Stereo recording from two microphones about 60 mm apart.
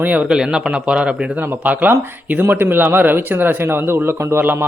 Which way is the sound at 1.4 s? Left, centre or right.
Right.